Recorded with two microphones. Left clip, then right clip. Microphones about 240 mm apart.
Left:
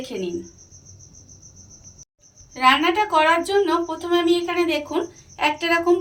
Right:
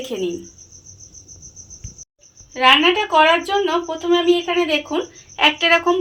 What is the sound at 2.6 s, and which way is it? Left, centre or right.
A woman's voice, right.